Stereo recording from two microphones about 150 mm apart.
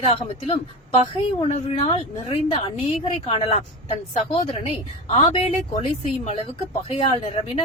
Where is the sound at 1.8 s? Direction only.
45° left (ahead or behind).